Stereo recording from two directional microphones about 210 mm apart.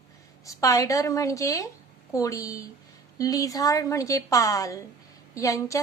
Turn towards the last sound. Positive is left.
turn(degrees=15)  # may be behind; listen again after turning